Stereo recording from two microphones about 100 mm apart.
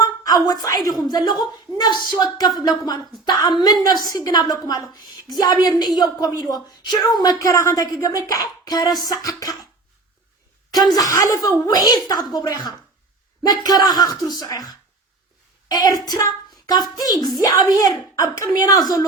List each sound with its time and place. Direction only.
0.0 s a sound: 40° left (ahead or behind)
0.9 s speech: 40° left (ahead or behind)
10.7 s speech: 40° left (ahead or behind)